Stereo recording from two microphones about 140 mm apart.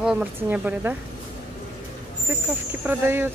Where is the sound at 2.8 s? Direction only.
15° right (ahead or behind).